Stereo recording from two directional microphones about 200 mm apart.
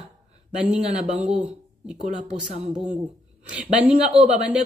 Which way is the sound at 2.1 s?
35° right (ahead or behind).